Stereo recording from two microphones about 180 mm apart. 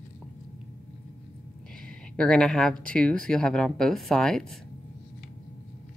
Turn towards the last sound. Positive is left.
turn(degrees=5)  # may be behind; listen again after turning